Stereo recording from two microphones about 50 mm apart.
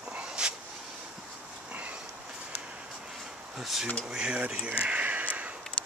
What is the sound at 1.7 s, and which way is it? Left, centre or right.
Train, right.